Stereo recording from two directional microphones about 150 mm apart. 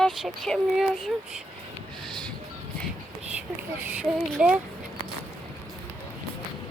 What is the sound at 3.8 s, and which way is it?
Speech, 10° right (ahead or behind).